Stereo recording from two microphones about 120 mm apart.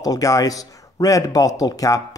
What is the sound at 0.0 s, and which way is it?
Speech, 30° left (ahead or behind).